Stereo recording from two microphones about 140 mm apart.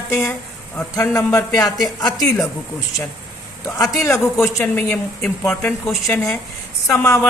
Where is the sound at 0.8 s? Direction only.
10° left (ahead or behind).